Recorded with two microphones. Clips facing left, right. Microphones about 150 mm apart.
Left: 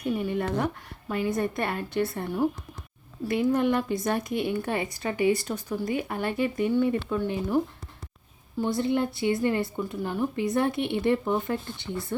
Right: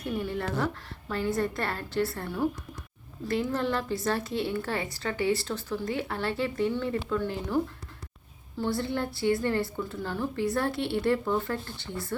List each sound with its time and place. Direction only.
0.2 s a woman's voice: 20° left (ahead or behind)